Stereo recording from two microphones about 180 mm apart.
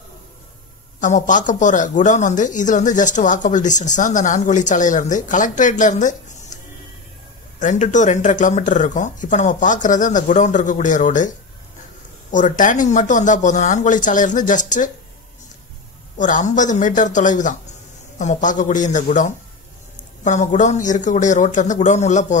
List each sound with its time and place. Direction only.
1.0 s speech: 45° left (ahead or behind)
16.2 s speech: 45° left (ahead or behind)